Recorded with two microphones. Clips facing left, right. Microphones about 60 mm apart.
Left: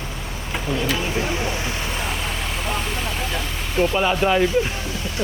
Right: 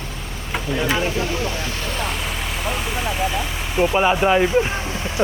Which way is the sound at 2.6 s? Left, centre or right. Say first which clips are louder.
Right 3 dB; centre.